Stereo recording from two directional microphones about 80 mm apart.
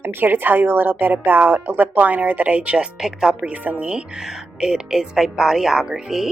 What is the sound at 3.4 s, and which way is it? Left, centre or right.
Speech, centre.